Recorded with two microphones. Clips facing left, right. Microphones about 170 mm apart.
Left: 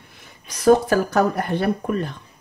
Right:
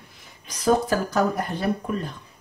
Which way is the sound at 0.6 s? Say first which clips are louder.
Left 5 dB; 65° left (ahead or behind).